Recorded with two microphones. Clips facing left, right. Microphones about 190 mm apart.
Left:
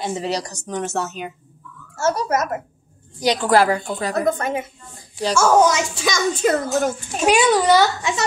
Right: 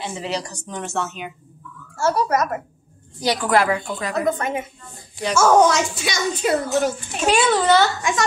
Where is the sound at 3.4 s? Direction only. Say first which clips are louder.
Left 2 dB; 35° left (ahead or behind).